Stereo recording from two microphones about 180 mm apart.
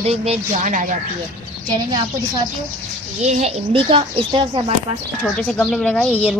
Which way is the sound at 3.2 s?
40° right (ahead or behind).